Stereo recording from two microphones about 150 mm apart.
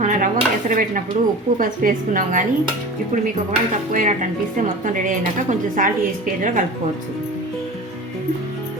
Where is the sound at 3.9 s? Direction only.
60° right (ahead or behind).